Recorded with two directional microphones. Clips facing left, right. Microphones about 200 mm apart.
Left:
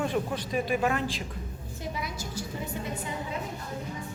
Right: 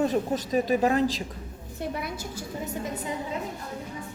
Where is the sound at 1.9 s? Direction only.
55° right (ahead or behind).